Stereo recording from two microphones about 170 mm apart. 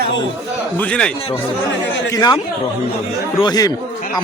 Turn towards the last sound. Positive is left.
turn(degrees=20)  # may be behind; listen again after turning